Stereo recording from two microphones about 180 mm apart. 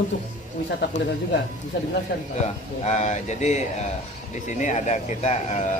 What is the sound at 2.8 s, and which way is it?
A man's voice, 40° left (ahead or behind).